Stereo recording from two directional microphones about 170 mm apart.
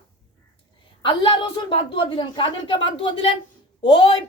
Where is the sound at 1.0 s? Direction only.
30° left (ahead or behind).